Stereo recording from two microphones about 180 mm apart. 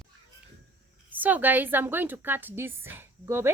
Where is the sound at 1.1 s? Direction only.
10° right (ahead or behind).